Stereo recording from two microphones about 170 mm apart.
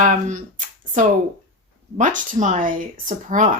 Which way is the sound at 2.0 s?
50° right (ahead or behind).